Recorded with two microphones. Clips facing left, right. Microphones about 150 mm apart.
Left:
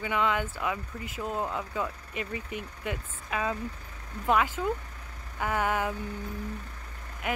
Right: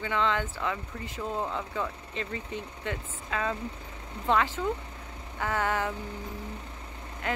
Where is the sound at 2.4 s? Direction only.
25° right (ahead or behind).